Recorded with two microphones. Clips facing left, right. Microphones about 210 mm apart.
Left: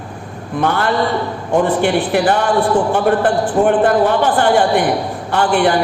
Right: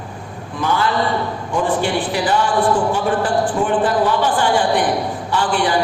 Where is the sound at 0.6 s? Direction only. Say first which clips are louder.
Left 2 dB; 60° left (ahead or behind).